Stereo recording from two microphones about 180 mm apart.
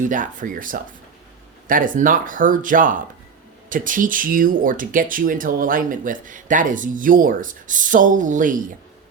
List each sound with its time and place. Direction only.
0.0 s speech: 45° right (ahead or behind)